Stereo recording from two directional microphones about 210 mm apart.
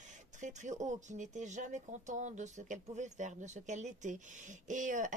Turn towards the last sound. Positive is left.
turn(degrees=-35)  # may be behind; listen again after turning